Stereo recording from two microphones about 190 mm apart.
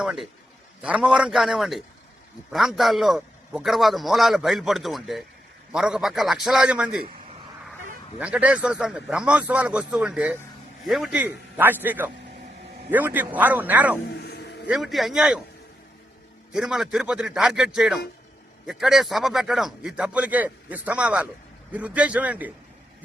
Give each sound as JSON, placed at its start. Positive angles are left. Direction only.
{"t": 0.0, "sound": "a man's voice", "side_deg": 0}
{"t": 8.2, "sound": "a man's voice", "side_deg": -5}
{"t": 14.1, "sound": "a sound", "side_deg": 60}
{"t": 14.7, "sound": "a man's voice", "side_deg": 0}
{"t": 16.5, "sound": "a man's voice", "side_deg": -5}